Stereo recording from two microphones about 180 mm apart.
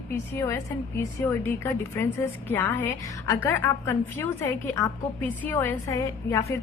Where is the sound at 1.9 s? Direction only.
10° left (ahead or behind).